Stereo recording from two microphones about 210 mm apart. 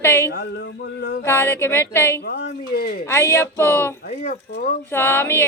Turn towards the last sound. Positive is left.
turn(degrees=10)  # may be behind; listen again after turning